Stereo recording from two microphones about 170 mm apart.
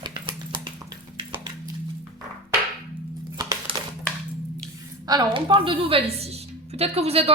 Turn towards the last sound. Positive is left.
turn(degrees=-35)  # may be behind; listen again after turning